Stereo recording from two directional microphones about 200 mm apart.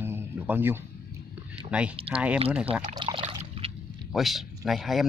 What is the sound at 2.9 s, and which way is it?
Water, 25° right (ahead or behind).